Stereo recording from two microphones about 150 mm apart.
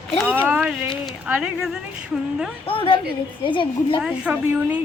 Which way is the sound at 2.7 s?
35° left (ahead or behind).